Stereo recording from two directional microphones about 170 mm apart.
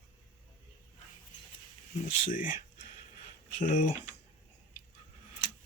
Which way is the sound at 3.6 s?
50° left (ahead or behind).